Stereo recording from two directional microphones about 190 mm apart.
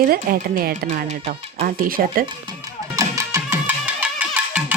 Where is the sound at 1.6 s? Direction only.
50° right (ahead or behind).